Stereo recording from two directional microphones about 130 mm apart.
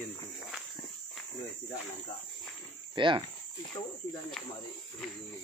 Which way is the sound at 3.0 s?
40° right (ahead or behind).